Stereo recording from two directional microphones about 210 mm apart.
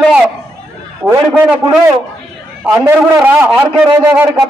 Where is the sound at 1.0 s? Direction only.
10° right (ahead or behind).